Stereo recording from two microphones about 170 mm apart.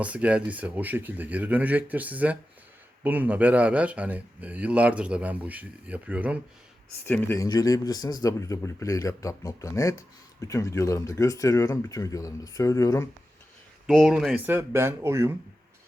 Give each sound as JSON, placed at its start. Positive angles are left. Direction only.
{"t": 0.0, "sound": "a man's voice", "side_deg": -5}
{"t": 7.0, "sound": "speech", "side_deg": 15}
{"t": 13.8, "sound": "a man's voice", "side_deg": 0}